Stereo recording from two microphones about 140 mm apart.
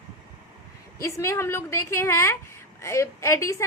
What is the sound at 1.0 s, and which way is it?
A woman's voice, 20° left (ahead or behind).